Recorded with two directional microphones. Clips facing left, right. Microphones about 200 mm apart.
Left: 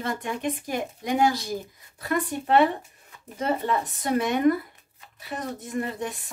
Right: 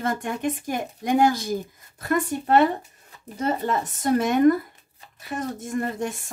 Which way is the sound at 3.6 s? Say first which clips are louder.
Right 2 dB; 45° right (ahead or behind).